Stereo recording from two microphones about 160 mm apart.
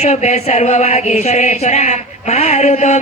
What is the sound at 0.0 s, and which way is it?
Speech, 45° left (ahead or behind).